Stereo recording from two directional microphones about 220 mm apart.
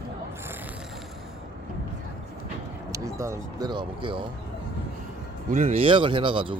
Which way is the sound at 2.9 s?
15° right (ahead or behind).